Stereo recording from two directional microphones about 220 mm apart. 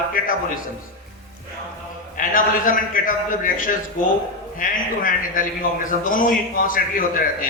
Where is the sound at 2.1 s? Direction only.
40° left (ahead or behind).